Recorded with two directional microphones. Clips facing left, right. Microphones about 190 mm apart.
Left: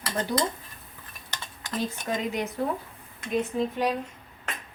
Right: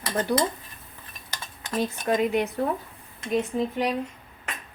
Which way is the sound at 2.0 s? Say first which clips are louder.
Right 8 dB; 60° right (ahead or behind).